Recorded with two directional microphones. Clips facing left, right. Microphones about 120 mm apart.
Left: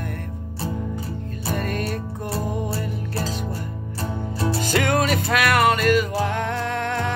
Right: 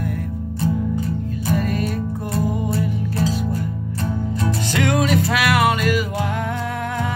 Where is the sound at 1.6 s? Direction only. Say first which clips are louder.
Right 3 dB; centre (ahead or behind).